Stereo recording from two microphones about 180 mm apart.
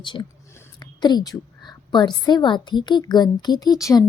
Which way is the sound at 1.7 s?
25° left (ahead or behind).